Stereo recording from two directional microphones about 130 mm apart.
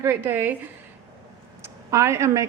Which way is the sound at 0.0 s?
20° right (ahead or behind).